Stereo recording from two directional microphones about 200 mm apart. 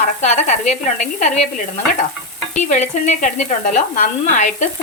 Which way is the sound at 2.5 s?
35° left (ahead or behind).